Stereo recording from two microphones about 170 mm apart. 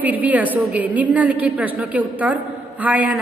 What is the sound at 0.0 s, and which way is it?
A woman's voice, 10° right (ahead or behind).